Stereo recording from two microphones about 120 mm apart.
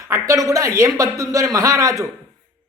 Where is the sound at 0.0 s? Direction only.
25° right (ahead or behind).